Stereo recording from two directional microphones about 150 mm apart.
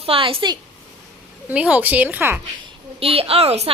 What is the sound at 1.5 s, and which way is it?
Speech, 10° right (ahead or behind).